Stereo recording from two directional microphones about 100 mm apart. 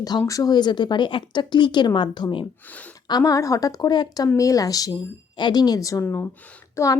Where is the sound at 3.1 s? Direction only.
40° left (ahead or behind).